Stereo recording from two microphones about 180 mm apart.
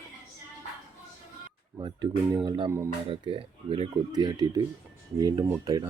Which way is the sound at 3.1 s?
30° right (ahead or behind).